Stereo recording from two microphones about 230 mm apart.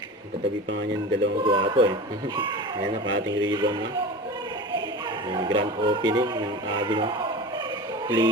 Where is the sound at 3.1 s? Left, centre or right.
Right.